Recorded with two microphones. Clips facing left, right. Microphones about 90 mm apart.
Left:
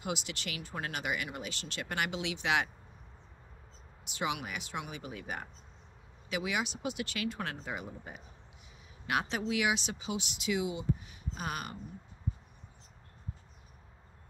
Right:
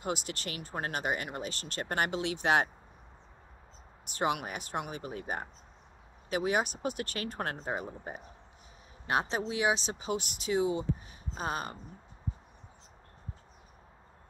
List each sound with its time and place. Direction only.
0.0 s speech: 40° right (ahead or behind)
4.0 s speech: 45° right (ahead or behind)